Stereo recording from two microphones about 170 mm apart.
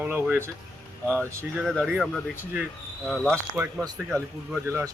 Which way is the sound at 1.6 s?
5° left (ahead or behind).